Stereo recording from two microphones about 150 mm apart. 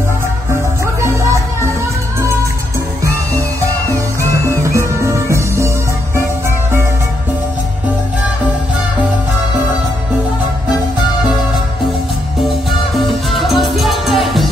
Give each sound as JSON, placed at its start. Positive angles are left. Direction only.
{"t": 4.6, "sound": "music", "side_deg": -20}
{"t": 12.4, "sound": "music", "side_deg": 0}